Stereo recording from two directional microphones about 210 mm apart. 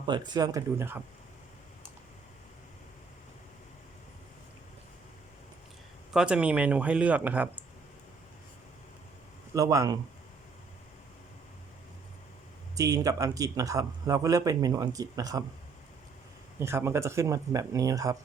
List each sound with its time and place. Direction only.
0.0 s speech: 20° right (ahead or behind)
6.1 s speech: 5° right (ahead or behind)
9.6 s speech: 15° right (ahead or behind)
12.7 s speech: 15° right (ahead or behind)
16.6 s speech: 10° right (ahead or behind)